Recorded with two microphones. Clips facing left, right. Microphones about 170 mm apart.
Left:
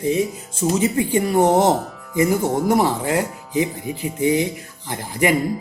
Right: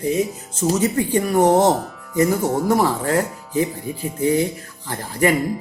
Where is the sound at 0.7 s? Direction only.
10° left (ahead or behind).